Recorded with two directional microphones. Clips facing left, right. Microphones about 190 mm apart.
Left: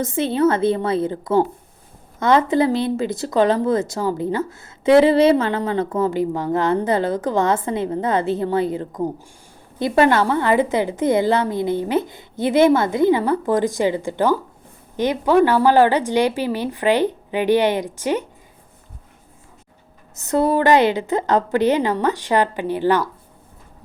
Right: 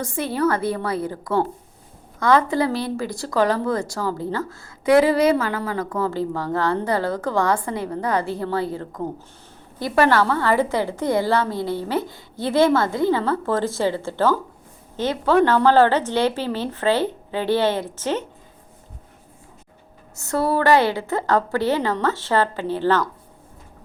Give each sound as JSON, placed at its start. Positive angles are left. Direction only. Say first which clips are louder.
{"t": 0.0, "sound": "a woman's voice", "louder": "left 4 dB", "side_deg": 20}
{"t": 20.1, "sound": "a woman's voice", "louder": "left 3 dB", "side_deg": 20}